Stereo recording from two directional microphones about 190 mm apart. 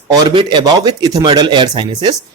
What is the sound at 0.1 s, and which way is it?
Speech, 25° right (ahead or behind).